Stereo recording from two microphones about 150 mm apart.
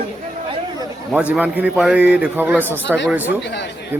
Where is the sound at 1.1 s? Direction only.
10° right (ahead or behind).